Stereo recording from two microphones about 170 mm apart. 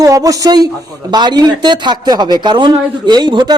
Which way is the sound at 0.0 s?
20° right (ahead or behind).